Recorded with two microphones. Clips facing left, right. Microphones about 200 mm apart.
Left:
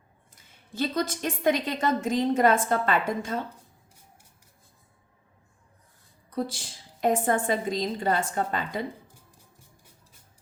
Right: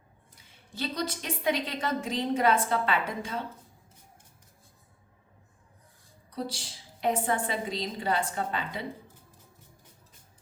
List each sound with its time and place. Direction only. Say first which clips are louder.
0.8 s a woman's voice: left 5 dB; 50° left (ahead or behind)
6.3 s a woman's voice: left 5 dB; 50° left (ahead or behind)